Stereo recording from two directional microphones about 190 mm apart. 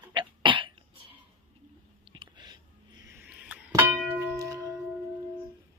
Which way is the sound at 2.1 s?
25° right (ahead or behind).